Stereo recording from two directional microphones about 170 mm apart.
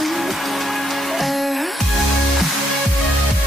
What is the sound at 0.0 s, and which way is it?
Music, centre (ahead or behind).